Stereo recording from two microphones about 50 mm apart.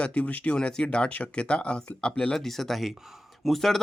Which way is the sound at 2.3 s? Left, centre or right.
Centre.